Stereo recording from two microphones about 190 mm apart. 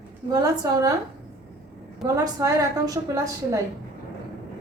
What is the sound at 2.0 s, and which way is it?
A woman's voice, 20° right (ahead or behind).